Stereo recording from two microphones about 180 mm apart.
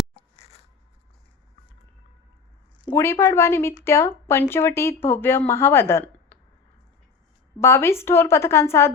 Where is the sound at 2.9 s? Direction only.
15° left (ahead or behind).